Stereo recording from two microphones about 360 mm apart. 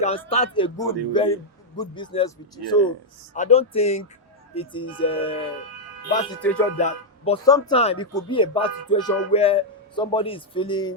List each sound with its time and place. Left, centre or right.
0.0 s speech: centre
6.4 s music: centre
6.7 s speech: centre